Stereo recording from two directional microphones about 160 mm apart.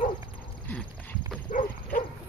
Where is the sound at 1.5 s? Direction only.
55° left (ahead or behind).